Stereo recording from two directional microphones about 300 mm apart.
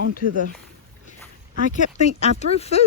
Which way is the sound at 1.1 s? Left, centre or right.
Left.